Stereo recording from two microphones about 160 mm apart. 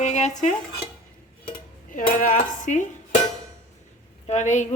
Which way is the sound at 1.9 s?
55° left (ahead or behind).